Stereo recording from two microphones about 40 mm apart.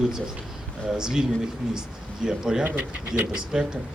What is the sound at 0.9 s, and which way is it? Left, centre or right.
A man's voice, centre.